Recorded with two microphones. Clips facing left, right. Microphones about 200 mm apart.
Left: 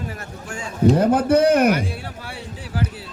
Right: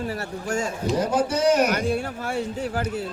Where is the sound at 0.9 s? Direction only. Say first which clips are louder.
Left 3 dB; 55° left (ahead or behind).